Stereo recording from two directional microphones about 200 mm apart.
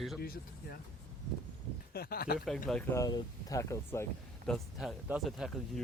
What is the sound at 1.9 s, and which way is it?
Speech, 50° left (ahead or behind).